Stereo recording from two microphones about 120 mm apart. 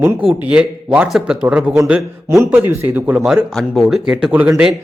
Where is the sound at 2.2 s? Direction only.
20° right (ahead or behind); by 4.3 s 5° right (ahead or behind).